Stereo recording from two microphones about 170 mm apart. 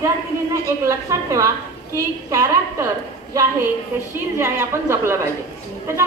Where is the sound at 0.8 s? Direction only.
20° right (ahead or behind).